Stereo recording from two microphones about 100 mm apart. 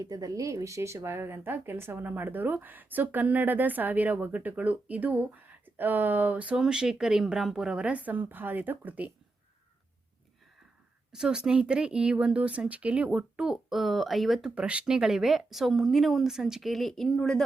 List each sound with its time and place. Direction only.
0.0 s a woman's voice: 35° right (ahead or behind); by 9.1 s 15° right (ahead or behind)
11.1 s speech: 5° right (ahead or behind)